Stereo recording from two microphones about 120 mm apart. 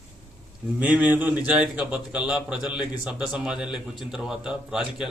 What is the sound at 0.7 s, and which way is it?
A man's voice, 15° right (ahead or behind).